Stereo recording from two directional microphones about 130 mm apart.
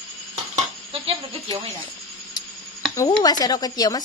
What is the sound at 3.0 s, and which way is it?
Speech, 30° left (ahead or behind).